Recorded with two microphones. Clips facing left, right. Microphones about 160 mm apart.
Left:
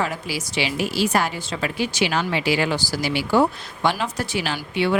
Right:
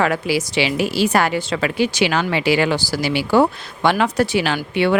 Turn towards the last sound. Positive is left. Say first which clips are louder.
# right 4 dB
turn(degrees=-60)  # may be behind; listen again after turning